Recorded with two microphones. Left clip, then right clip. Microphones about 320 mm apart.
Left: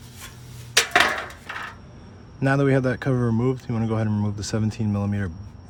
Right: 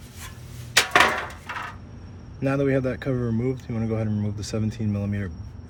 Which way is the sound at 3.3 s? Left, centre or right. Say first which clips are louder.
Left 3 dB; left.